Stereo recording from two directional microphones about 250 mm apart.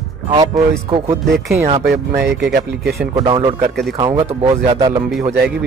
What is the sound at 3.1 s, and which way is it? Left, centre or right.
Speech, centre.